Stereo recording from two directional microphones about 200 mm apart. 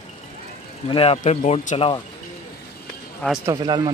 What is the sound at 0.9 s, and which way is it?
Speech, 30° left (ahead or behind).